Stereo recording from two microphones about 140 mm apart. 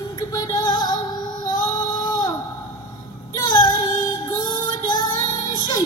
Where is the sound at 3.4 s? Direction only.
30° left (ahead or behind).